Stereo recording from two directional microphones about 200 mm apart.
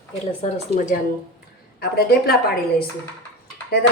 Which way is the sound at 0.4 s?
35° left (ahead or behind).